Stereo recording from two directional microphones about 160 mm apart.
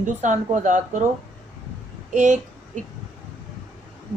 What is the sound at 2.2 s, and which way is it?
Speech, 50° right (ahead or behind).